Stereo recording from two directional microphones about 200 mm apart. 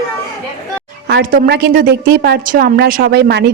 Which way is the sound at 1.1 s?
55° right (ahead or behind).